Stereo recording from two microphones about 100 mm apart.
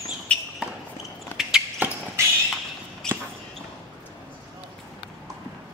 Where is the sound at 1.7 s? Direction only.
20° right (ahead or behind).